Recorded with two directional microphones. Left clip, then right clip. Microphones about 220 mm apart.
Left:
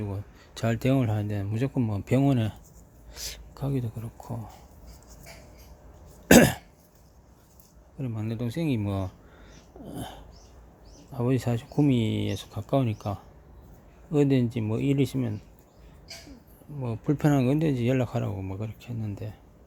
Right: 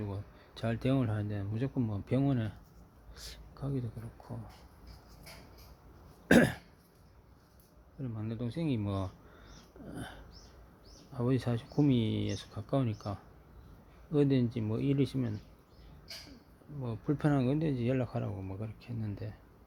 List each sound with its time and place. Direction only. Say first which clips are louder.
0.0 s speech: left 5 dB; 15° left (ahead or behind)
6.2 s cough: left 8 dB; 20° left (ahead or behind)
7.9 s speech: left 7 dB; 15° left (ahead or behind)
16.8 s speech: left 7 dB; 15° left (ahead or behind)